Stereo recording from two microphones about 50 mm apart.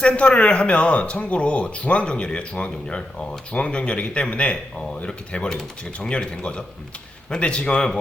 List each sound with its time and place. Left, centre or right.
0.0 s speech: left